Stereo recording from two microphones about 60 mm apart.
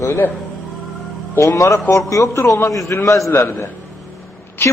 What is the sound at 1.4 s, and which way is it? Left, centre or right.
A man's voice, left.